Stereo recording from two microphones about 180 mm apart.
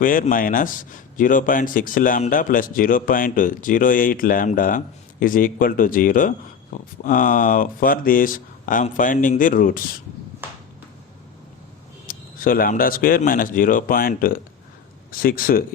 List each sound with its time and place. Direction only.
0.0 s speech: 50° left (ahead or behind)
12.0 s speech: 50° left (ahead or behind)